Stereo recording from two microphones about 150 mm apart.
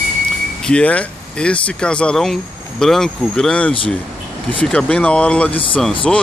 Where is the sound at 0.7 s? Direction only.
10° left (ahead or behind).